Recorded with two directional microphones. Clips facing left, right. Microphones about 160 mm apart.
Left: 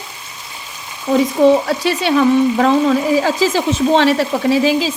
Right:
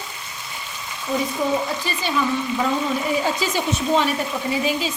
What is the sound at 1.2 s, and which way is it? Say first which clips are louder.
Speech: left 11 dB; 85° left.